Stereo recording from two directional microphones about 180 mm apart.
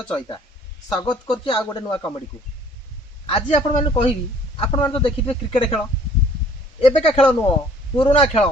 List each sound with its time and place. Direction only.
0.0 s speech: 25° left (ahead or behind)
3.2 s a man's voice: 30° left (ahead or behind)
6.8 s a man's voice: 35° left (ahead or behind)